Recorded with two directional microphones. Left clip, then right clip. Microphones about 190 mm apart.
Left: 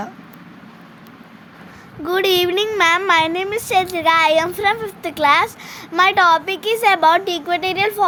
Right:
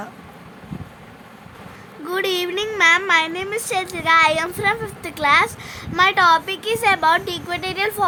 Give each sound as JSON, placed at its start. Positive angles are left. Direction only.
{"t": 2.0, "sound": "a woman's voice", "side_deg": 25}